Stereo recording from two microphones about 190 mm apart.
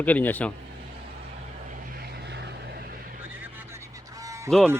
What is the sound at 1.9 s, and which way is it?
Vehicle, 55° right (ahead or behind).